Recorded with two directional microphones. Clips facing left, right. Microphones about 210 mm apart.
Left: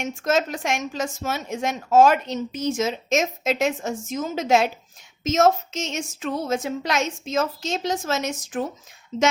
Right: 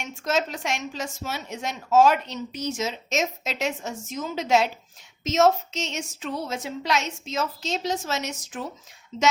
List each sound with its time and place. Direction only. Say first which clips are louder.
0.0 s speech: left 4 dB; 50° left (ahead or behind)